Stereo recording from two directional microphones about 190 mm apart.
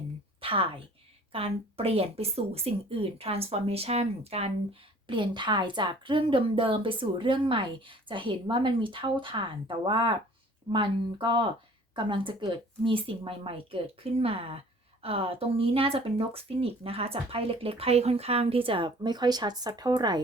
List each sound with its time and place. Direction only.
0.4 s a woman's voice: 30° right (ahead or behind)